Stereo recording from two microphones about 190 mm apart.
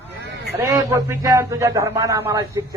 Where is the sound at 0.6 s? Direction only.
20° right (ahead or behind).